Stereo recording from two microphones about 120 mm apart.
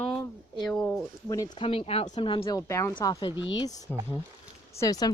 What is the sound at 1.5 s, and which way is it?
Speech, 50° left (ahead or behind).